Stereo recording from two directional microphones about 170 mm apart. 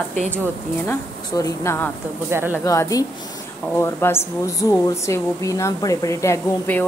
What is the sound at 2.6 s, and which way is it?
A woman's voice, 20° left (ahead or behind).